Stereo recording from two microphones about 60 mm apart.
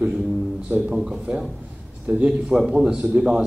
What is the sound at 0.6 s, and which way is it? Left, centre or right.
Speech, right.